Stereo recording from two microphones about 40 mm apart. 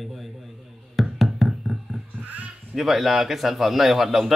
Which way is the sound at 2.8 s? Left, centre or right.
Centre.